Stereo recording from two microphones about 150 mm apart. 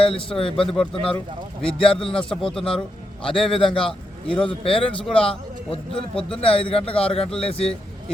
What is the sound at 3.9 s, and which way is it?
Speech, 5° left (ahead or behind).